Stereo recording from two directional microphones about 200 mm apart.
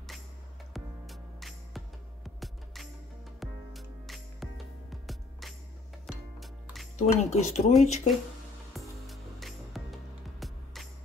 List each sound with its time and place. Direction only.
0.7 s music: centre (ahead or behind)
6.4 s music: centre (ahead or behind)
7.0 s speech: 35° left (ahead or behind)
8.7 s music: centre (ahead or behind)